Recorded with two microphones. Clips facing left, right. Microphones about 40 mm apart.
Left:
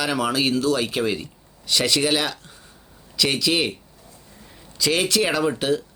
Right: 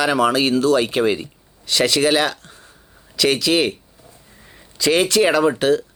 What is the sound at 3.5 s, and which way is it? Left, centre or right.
Speech, centre.